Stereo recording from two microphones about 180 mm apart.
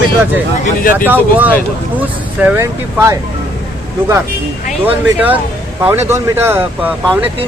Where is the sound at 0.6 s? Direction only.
50° left (ahead or behind).